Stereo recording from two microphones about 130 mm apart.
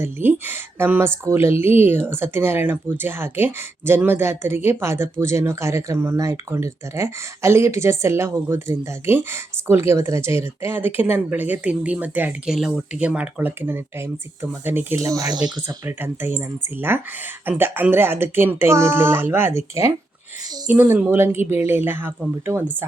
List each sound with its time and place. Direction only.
0.0 s a woman's voice: 15° right (ahead or behind)
12.5 s a woman's voice: centre (ahead or behind); by 15.7 s 35° right (ahead or behind)
15.9 s a woman's voice: 15° right (ahead or behind)